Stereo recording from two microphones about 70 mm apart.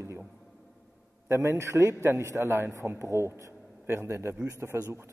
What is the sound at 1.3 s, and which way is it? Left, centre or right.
A man's voice, right.